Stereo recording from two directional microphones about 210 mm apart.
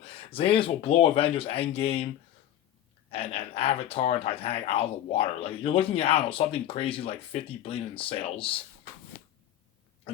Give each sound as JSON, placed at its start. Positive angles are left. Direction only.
{"t": 0.0, "sound": "speech", "side_deg": 25}
{"t": 3.1, "sound": "speech", "side_deg": 25}